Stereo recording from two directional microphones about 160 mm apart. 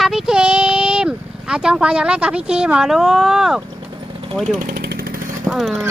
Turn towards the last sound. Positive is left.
turn(degrees=0)  # may be behind; listen again after turning